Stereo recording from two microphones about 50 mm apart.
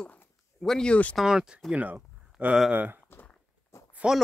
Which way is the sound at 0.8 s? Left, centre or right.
Left.